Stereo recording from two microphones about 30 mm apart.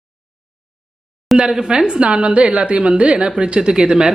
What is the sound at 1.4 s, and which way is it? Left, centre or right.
Speech, right.